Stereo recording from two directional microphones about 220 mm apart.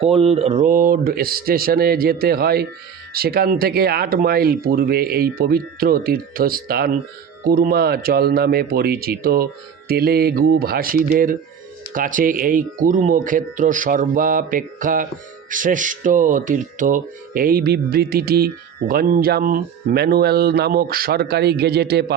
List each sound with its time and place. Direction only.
0.0 s speech: 25° right (ahead or behind); by 22.1 s 45° right (ahead or behind)